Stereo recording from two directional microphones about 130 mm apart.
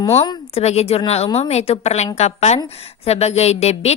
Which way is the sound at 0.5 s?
55° left (ahead or behind).